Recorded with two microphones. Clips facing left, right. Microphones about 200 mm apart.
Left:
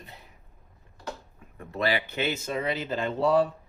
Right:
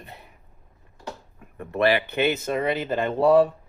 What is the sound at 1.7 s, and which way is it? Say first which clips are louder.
Speech: right 6 dB; 60° right (ahead or behind).